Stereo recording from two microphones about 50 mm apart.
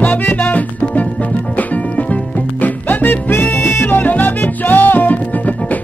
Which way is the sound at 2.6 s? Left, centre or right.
Left.